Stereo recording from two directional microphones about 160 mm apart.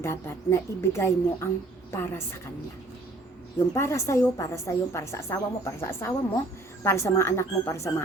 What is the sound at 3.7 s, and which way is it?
A woman's voice, 15° left (ahead or behind).